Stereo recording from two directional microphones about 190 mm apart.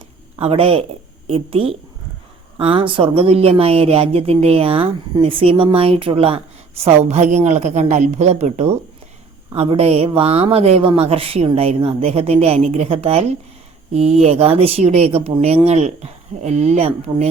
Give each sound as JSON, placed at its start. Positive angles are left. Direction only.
{"t": 0.3, "sound": "a man's voice", "side_deg": -30}